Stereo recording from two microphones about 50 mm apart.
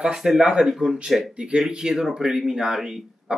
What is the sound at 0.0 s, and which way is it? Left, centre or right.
Speech, centre.